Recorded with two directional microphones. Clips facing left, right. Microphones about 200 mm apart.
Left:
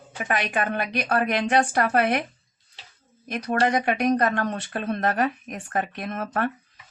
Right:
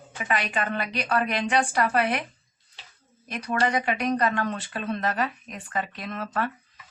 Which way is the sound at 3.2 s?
50° left (ahead or behind).